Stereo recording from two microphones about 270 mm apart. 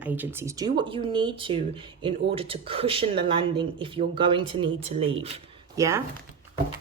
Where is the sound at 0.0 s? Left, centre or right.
Centre.